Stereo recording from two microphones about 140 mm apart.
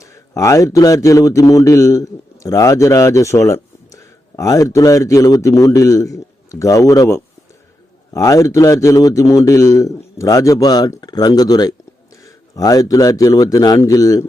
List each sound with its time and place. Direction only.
0.0 s a man's voice: 25° left (ahead or behind)